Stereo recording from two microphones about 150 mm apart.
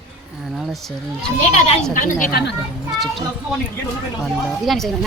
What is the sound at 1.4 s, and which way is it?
Speech, 50° left (ahead or behind).